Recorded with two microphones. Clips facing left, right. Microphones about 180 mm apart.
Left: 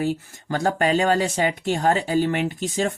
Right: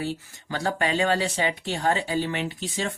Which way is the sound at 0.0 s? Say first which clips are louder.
Left 6 dB; 45° left (ahead or behind).